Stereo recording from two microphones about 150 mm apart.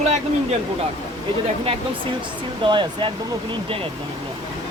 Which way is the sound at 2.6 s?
35° right (ahead or behind).